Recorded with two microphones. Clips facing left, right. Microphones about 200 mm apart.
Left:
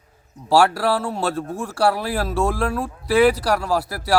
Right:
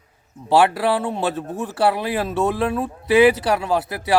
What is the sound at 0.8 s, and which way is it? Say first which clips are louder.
Speech: right 1 dB; 20° right (ahead or behind).